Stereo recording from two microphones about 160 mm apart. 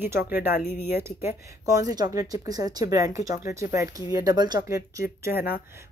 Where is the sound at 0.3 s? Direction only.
10° right (ahead or behind).